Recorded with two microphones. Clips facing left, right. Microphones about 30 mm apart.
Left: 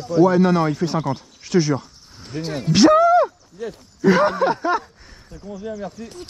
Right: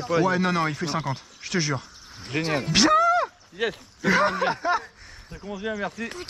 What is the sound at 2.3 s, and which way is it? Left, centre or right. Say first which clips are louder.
Speech: right 1 dB; right.